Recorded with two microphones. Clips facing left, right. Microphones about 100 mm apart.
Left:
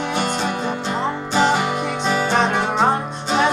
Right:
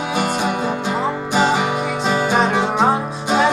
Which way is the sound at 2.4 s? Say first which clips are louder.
Right 2 dB; 5° right (ahead or behind).